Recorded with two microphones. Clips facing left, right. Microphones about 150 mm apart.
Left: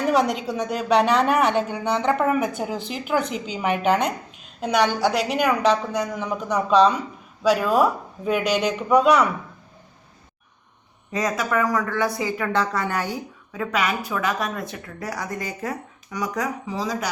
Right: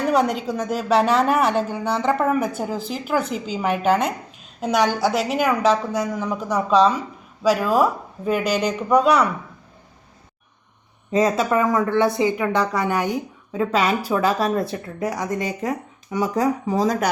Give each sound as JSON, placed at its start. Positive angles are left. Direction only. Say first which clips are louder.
{"t": 0.1, "sound": "a woman's voice", "louder": "right 1 dB", "side_deg": 0}
{"t": 11.1, "sound": "a woman's voice", "louder": "right 5 dB", "side_deg": -25}
{"t": 15.0, "sound": "a woman's voice", "louder": "right 5 dB", "side_deg": -20}
{"t": 16.6, "sound": "speech", "louder": "right 7 dB", "side_deg": -50}